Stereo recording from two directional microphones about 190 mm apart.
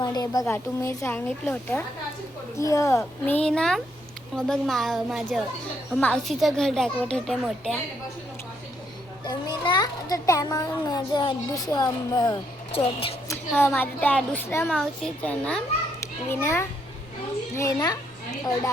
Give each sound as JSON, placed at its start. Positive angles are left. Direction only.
{"t": 0.0, "sound": "a woman's voice", "side_deg": 20}
{"t": 9.2, "sound": "a child's voice", "side_deg": 20}
{"t": 13.6, "sound": "a woman's voice", "side_deg": 10}